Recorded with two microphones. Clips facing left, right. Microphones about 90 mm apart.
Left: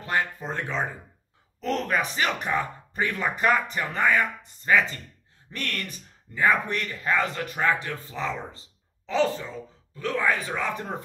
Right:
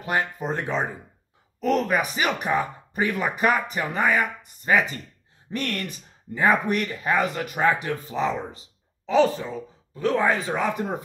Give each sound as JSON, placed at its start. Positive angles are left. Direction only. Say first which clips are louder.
{"t": 0.0, "sound": "speech", "louder": "right 2 dB", "side_deg": -15}
{"t": 1.6, "sound": "speech", "louder": "right 4 dB", "side_deg": -5}